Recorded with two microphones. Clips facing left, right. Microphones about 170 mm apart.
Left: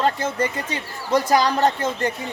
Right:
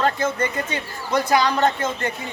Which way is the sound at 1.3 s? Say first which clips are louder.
Right 1 dB; 35° left (ahead or behind).